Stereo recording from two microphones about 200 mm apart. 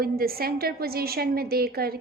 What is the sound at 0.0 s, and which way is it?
A woman's voice, 50° right (ahead or behind).